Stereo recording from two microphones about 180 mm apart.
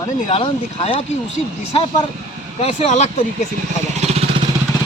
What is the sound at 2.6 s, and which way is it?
Speech, 35° left (ahead or behind).